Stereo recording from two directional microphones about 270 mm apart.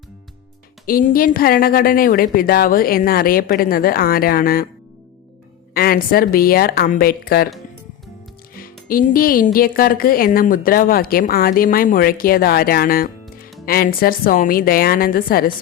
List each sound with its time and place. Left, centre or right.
0.9 s a woman's voice: left
5.7 s a woman's voice: left
8.9 s a woman's voice: left